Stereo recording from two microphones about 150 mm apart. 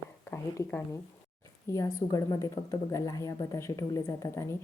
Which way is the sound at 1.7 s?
20° left (ahead or behind).